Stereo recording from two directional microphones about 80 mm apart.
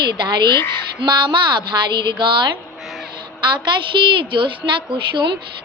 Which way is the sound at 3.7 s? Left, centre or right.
Right.